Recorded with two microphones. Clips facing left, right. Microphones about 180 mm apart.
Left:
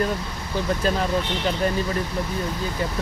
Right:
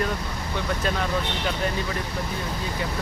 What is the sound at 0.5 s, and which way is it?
Speech, 35° left (ahead or behind).